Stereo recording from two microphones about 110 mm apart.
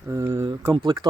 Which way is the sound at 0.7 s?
40° right (ahead or behind).